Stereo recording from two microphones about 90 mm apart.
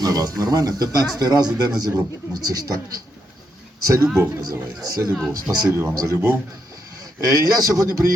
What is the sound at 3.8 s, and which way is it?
Speech, 35° right (ahead or behind).